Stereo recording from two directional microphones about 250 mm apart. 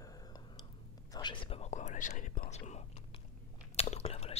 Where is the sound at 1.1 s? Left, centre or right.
Centre.